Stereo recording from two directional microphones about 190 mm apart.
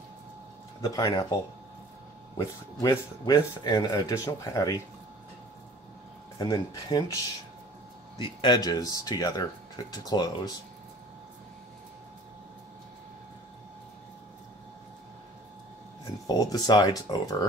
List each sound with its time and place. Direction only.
0.8 s speech: 20° left (ahead or behind)
2.3 s speech: 20° left (ahead or behind)
6.3 s speech: 20° left (ahead or behind)
8.4 s speech: 20° left (ahead or behind)
16.3 s speech: 20° left (ahead or behind)